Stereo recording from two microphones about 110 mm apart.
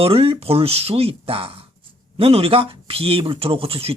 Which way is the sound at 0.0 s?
60° right (ahead or behind).